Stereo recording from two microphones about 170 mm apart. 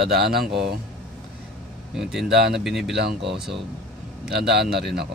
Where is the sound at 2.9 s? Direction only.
80° right.